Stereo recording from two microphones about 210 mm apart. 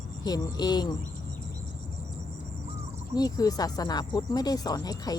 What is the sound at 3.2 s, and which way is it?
Speech, 20° left (ahead or behind).